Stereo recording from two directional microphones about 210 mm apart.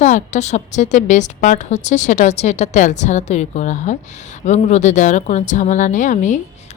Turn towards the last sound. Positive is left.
turn(degrees=35)  # may be behind; listen again after turning